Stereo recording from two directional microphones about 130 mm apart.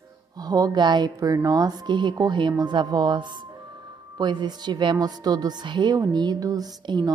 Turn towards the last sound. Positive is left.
turn(degrees=-30)  # may be behind; listen again after turning